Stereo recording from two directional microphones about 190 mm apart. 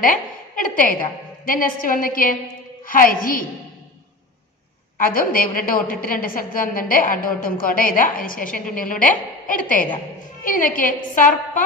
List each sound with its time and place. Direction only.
0.0 s a sound: 45° left (ahead or behind)
1.4 s a woman's voice: 50° left (ahead or behind)
5.0 s a woman's voice: 50° left (ahead or behind)